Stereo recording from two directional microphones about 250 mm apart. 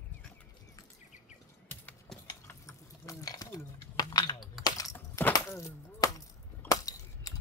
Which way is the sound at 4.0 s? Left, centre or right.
Centre.